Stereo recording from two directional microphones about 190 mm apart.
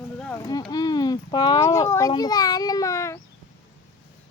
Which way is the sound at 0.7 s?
20° left (ahead or behind).